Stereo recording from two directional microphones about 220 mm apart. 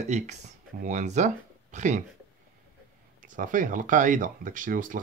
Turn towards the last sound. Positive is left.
turn(degrees=-35)  # may be behind; listen again after turning